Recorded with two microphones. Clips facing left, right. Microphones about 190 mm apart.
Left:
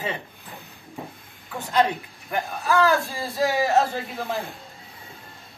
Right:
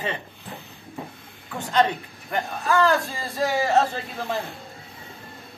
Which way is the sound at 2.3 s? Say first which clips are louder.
Even; 5° left (ahead or behind).